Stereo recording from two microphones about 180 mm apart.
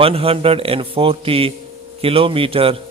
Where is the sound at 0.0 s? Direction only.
30° right (ahead or behind).